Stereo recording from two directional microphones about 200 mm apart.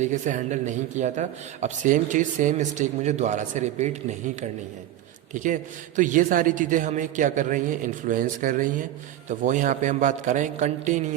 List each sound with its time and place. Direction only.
0.0 s speech: 40° right (ahead or behind)
5.3 s speech: 40° right (ahead or behind)